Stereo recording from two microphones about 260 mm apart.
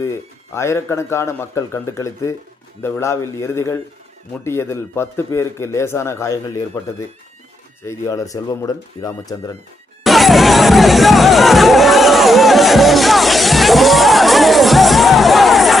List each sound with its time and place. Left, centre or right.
0.0 s speech: centre
10.0 s music: centre